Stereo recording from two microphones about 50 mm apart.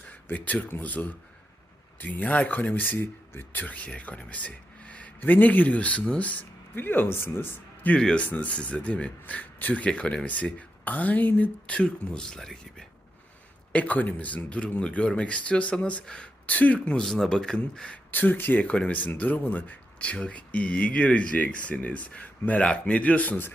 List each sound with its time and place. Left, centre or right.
0.0 s a sound: left
0.7 s speech: left
6.7 s speech: left
7.9 s speech: centre
8.2 s speech: left
11.6 s speech: left
13.7 s speech: left
16.5 s speech: left
17.0 s speech: centre
17.9 s speech: left